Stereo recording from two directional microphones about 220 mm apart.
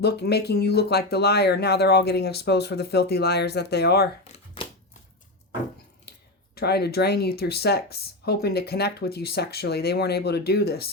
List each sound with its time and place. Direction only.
0.0 s speech: 45° left (ahead or behind)
4.2 s a sound: 25° left (ahead or behind)
6.6 s speech: 45° left (ahead or behind)